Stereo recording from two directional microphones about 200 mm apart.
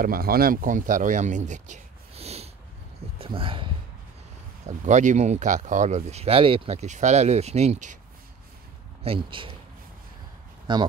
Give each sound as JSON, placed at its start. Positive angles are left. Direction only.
{"t": 0.0, "sound": "speech", "side_deg": -50}
{"t": 4.6, "sound": "speech", "side_deg": -35}
{"t": 9.0, "sound": "speech", "side_deg": -25}
{"t": 10.7, "sound": "speech", "side_deg": -20}